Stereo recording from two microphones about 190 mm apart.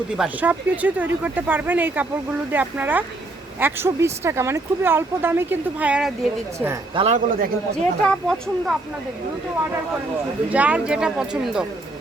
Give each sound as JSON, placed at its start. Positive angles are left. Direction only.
{"t": 0.2, "sound": "speech", "side_deg": -10}
{"t": 6.9, "sound": "a man's voice", "side_deg": -35}
{"t": 8.0, "sound": "speech", "side_deg": 5}
{"t": 10.5, "sound": "speech", "side_deg": -5}